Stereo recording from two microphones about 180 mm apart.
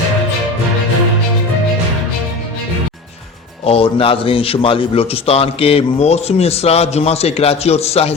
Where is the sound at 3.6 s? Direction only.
30° left (ahead or behind).